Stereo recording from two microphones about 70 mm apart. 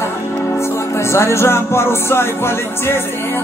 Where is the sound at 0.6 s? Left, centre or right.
Left.